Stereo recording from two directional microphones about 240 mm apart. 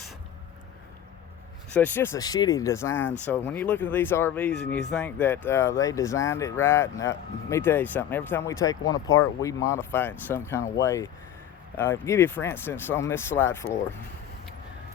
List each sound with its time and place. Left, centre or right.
1.7 s speech: centre
9.0 s speech: left
9.4 s speech: centre